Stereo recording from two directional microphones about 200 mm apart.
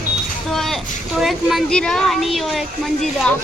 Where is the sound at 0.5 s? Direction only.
Centre (ahead or behind).